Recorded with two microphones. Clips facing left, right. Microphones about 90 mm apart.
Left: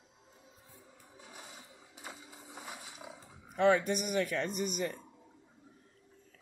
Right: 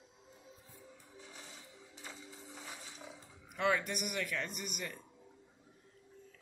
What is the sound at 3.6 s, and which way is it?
Speech, 35° left (ahead or behind).